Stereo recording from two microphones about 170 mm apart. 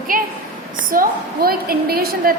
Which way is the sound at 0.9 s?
60° right (ahead or behind).